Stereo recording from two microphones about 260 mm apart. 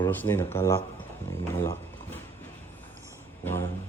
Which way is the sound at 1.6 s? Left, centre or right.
Centre.